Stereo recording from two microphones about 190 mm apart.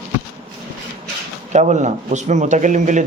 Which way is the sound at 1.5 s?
40° right (ahead or behind).